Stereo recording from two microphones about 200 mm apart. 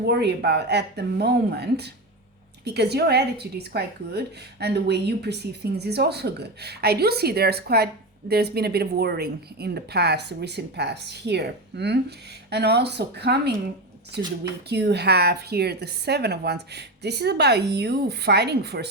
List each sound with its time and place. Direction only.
0.0 s a woman's voice: 55° right (ahead or behind)
14.7 s a woman's voice: 55° right (ahead or behind)